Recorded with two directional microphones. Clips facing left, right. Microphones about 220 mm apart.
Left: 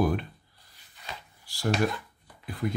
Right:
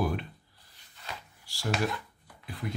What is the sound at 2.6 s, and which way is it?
Speech, 50° left (ahead or behind).